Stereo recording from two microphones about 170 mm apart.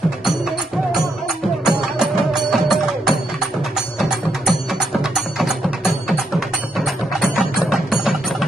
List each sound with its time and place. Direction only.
1.6 s music: 5° right (ahead or behind)